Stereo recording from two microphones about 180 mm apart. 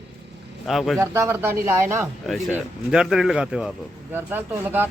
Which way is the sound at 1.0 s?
15° right (ahead or behind).